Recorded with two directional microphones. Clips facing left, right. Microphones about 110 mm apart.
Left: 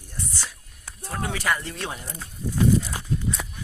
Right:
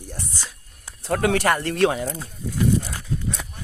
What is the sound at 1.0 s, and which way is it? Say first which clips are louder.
Speech: right 7 dB; 85° right.